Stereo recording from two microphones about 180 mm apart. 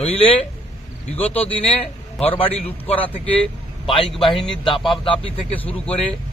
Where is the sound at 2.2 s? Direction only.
30° left (ahead or behind).